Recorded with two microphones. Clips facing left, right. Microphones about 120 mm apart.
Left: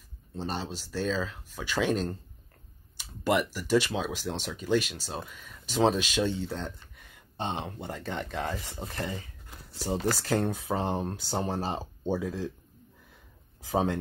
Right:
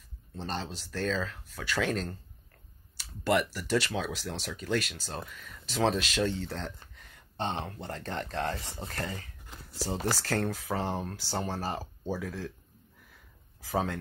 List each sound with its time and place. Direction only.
0.3 s speech: 15° left (ahead or behind)
13.6 s speech: 25° left (ahead or behind)